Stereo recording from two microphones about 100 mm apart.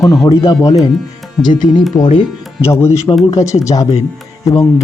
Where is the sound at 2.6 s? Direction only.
25° left (ahead or behind).